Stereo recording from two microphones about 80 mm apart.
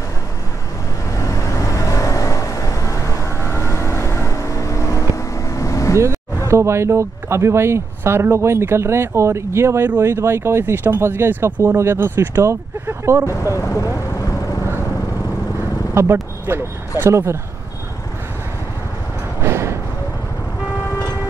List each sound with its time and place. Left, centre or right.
1.1 s vehicle: left
6.4 s speech: right
13.3 s speech: left
15.9 s speech: right
19.4 s vehicle: right